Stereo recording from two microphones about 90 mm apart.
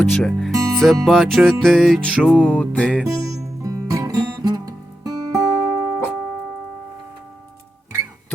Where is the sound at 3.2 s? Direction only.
40° right (ahead or behind).